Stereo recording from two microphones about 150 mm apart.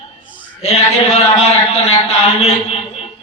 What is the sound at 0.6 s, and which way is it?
A man's voice, 40° left (ahead or behind).